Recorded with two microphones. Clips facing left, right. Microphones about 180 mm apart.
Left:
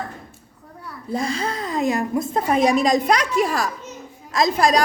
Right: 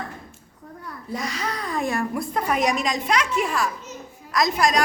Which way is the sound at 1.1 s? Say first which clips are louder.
Left 5 dB; 30° left (ahead or behind).